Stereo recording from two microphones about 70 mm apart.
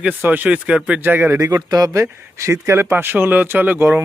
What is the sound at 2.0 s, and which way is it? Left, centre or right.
Speech, right.